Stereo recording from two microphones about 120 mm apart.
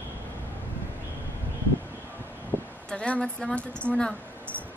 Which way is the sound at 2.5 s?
20° left (ahead or behind).